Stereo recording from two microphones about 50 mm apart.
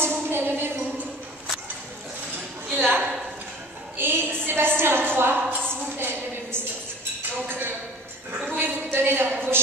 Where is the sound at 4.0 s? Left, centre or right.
Right.